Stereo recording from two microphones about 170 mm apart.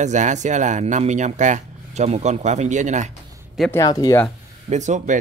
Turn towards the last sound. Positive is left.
turn(degrees=-45)  # may be behind; listen again after turning